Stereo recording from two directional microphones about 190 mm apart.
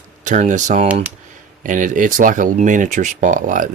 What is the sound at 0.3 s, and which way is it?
Speech, 40° right (ahead or behind).